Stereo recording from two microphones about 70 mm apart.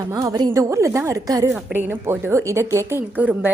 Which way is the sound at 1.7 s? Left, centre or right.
Right.